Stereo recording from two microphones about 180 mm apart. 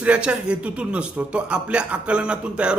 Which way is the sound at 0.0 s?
5° right (ahead or behind).